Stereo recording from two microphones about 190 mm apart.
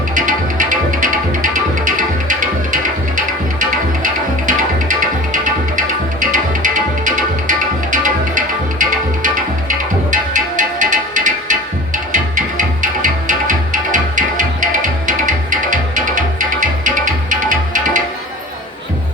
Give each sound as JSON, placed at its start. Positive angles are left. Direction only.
{"t": 0.1, "sound": "music", "side_deg": -40}